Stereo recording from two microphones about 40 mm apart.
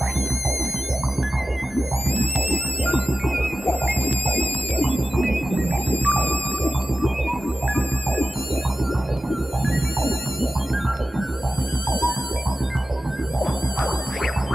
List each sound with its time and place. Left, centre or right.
4.9 s music: centre
5.6 s music: left
13.4 s music: centre